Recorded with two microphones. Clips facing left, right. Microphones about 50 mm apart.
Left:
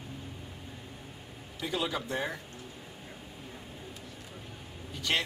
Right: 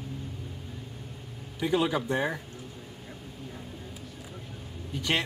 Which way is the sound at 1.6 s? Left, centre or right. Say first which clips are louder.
Right 7 dB; centre.